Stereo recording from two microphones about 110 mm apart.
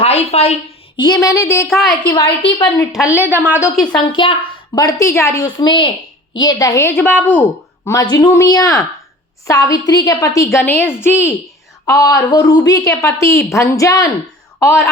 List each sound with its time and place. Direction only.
0.0 s speech: 70° left (ahead or behind)
0.9 s a woman's voice: 35° left (ahead or behind)
1.6 s a woman's voice: centre (ahead or behind)
1.9 s a woman's voice: 40° left (ahead or behind)
2.9 s a woman's voice: 10° right (ahead or behind)
3.9 s a woman's voice: 50° left (ahead or behind)
4.7 s a woman's voice: 35° left (ahead or behind); by 7.4 s 20° left (ahead or behind)
8.1 s a woman's voice: 35° left (ahead or behind)